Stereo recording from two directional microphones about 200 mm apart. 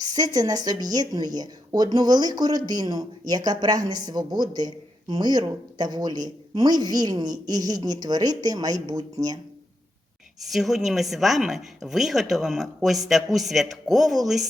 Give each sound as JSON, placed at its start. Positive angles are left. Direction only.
{"t": 0.0, "sound": "speech", "side_deg": -20}
{"t": 10.4, "sound": "a woman's voice", "side_deg": 0}